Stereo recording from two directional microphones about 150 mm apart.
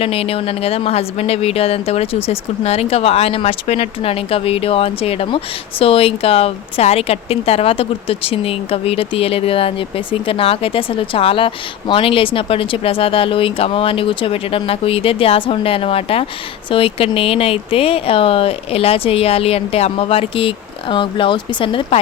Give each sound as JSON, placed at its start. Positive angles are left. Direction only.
{"t": 0.0, "sound": "speech", "side_deg": 40}